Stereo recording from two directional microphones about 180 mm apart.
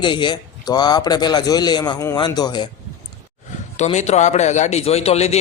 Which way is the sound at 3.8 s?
40° left (ahead or behind).